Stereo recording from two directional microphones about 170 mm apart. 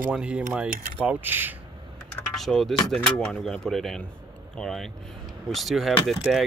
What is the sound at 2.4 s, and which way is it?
Speech, centre (ahead or behind).